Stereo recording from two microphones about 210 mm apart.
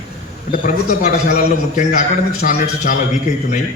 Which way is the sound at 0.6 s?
40° left (ahead or behind).